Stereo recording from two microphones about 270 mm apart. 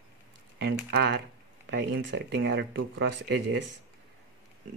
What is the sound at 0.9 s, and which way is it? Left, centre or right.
Speech, right.